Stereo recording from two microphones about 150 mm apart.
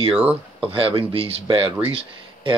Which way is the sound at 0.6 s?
40° right (ahead or behind).